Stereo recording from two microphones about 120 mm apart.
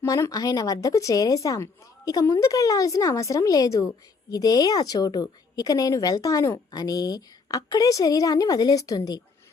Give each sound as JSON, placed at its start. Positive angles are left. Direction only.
{"t": 0.0, "sound": "a woman's voice", "side_deg": 25}